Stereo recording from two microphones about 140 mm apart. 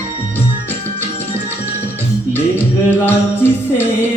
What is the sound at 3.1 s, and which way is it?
Music, 15° left (ahead or behind).